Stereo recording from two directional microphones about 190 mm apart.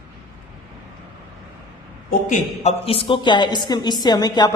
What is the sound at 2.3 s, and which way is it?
A woman's voice, 35° left (ahead or behind).